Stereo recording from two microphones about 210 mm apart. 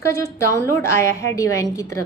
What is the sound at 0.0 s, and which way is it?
A woman's voice, 15° left (ahead or behind).